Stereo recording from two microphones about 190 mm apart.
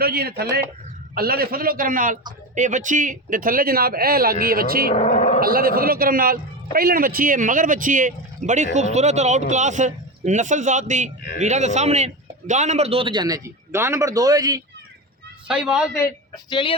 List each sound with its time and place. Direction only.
0.0 s a man's voice: 55° right (ahead or behind)
4.9 s a sound: 40° left (ahead or behind)
5.4 s a man's voice: 50° right (ahead or behind); by 14.6 s 20° right (ahead or behind)
15.4 s a man's voice: 5° right (ahead or behind)
16.5 s speech: 25° left (ahead or behind)